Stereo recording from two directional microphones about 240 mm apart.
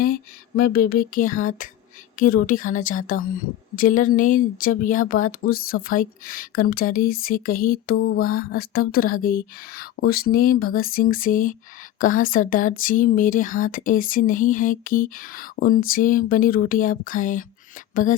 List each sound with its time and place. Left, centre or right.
0.0 s speech: left
7.9 s mantra: left
8.2 s speech: left